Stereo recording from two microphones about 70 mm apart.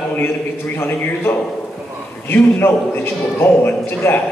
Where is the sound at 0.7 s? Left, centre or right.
Left.